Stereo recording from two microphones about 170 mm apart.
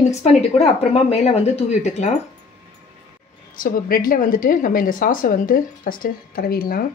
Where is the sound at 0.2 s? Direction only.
40° left (ahead or behind).